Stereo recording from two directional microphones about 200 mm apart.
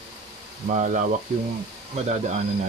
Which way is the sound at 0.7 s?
40° right (ahead or behind).